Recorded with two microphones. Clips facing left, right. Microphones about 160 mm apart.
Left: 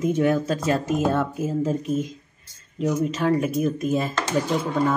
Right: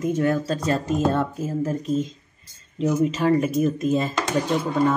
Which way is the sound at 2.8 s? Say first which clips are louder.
Right 2 dB; centre (ahead or behind).